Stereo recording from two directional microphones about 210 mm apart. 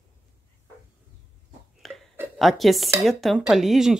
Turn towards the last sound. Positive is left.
turn(degrees=0)  # may be behind; listen again after turning